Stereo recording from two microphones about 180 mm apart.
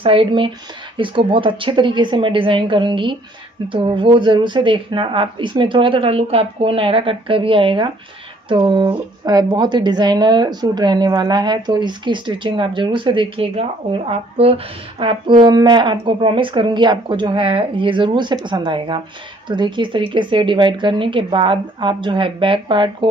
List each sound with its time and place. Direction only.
0.0 s speech: 30° right (ahead or behind)